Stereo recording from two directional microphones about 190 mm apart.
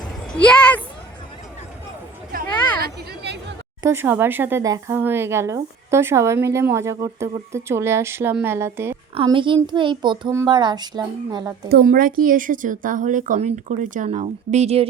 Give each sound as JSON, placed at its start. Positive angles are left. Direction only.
{"t": 0.4, "sound": "speech", "side_deg": 5}
{"t": 2.3, "sound": "a sound", "side_deg": -50}
{"t": 3.8, "sound": "speech", "side_deg": -10}
{"t": 9.1, "sound": "a child's voice", "side_deg": -25}
{"t": 11.7, "sound": "speech", "side_deg": -50}